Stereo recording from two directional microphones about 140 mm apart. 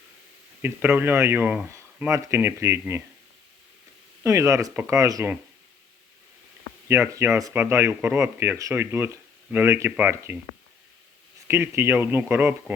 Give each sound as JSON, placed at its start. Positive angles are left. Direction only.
{"t": 0.6, "sound": "speech", "side_deg": -15}
{"t": 4.2, "sound": "speech", "side_deg": -20}
{"t": 6.8, "sound": "speech", "side_deg": -20}
{"t": 11.4, "sound": "speech", "side_deg": -15}